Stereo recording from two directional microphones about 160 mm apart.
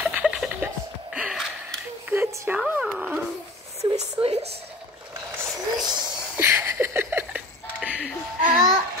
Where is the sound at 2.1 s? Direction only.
15° right (ahead or behind).